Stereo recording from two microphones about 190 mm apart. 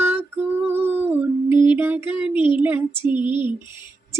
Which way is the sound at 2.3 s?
25° left (ahead or behind).